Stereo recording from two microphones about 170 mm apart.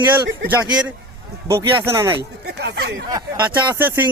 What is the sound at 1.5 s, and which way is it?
Speech, 15° right (ahead or behind).